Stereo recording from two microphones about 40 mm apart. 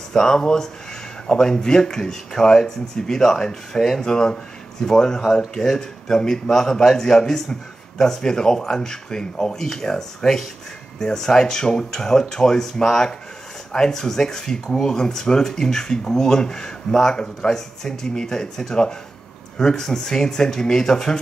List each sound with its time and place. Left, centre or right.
0.1 s speech: centre